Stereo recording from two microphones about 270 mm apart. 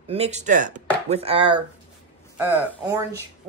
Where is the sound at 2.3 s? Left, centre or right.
Centre.